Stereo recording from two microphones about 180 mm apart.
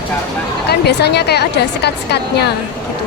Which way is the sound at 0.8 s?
70° left (ahead or behind).